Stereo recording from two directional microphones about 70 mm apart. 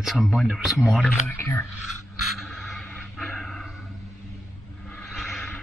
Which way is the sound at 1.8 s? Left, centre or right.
Centre.